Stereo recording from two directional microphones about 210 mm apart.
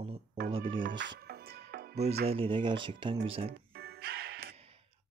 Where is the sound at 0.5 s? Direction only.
25° right (ahead or behind).